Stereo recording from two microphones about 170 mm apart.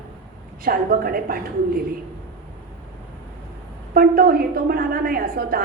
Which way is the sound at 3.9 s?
60° right (ahead or behind).